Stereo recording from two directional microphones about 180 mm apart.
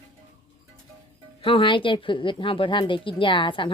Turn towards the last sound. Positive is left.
turn(degrees=30)  # may be behind; listen again after turning